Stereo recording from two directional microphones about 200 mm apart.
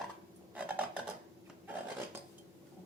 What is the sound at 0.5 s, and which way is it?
Dishes, 5° right (ahead or behind).